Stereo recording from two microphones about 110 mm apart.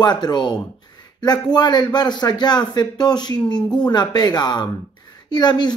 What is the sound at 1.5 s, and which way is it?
Speech, 40° left (ahead or behind).